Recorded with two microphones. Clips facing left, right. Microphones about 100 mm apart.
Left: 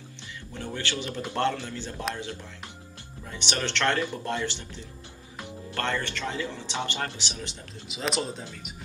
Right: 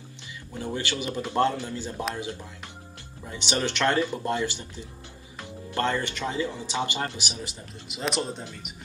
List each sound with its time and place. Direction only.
0.6 s a man's voice: 15° right (ahead or behind)
3.3 s a man's voice: 15° right (ahead or behind)
7.9 s speech: centre (ahead or behind)